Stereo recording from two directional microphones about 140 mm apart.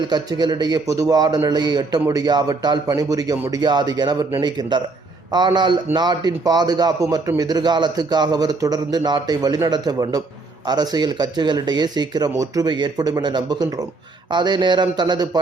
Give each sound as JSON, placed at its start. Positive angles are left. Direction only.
{"t": 0.1, "sound": "a man's voice", "side_deg": -30}